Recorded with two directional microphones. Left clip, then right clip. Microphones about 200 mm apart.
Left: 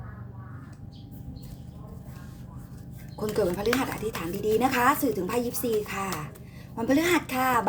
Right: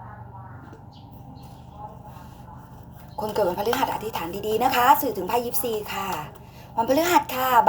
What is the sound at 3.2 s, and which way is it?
Speech, 60° left (ahead or behind).